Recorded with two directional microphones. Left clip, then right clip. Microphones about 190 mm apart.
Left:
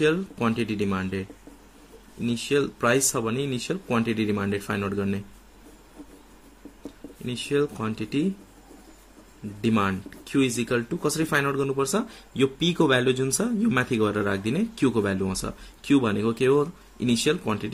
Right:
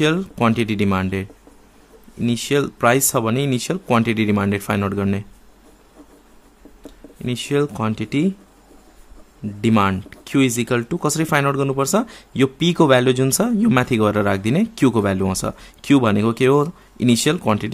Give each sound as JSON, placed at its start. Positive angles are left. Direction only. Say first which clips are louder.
{"t": 0.0, "sound": "speech", "louder": "right 5 dB", "side_deg": -40}
{"t": 2.2, "sound": "speech", "louder": "right 5 dB", "side_deg": -40}
{"t": 7.2, "sound": "speech", "louder": "right 5 dB", "side_deg": -40}
{"t": 9.6, "sound": "speech", "louder": "right 7 dB", "side_deg": -40}